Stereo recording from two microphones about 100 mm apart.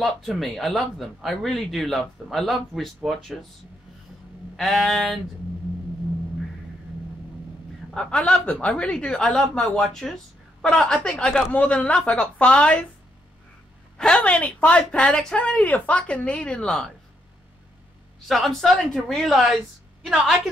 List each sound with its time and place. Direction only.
0.0 s speech: centre (ahead or behind)
4.6 s speech: centre (ahead or behind)
7.9 s a woman's voice: 5° left (ahead or behind)
13.9 s a woman's voice: 10° left (ahead or behind)
18.3 s speech: centre (ahead or behind)